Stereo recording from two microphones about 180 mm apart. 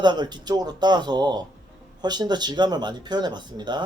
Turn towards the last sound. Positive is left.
turn(degrees=-25)  # may be behind; listen again after turning